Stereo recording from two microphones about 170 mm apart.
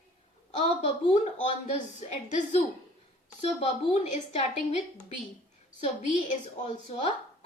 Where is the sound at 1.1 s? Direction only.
40° left (ahead or behind).